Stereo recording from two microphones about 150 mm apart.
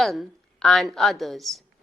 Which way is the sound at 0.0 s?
Centre (ahead or behind).